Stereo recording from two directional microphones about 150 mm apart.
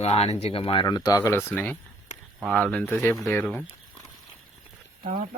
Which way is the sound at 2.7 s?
15° left (ahead or behind).